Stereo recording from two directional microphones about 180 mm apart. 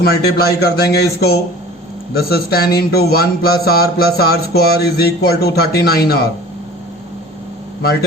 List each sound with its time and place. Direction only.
0.0 s speech: 60° left (ahead or behind)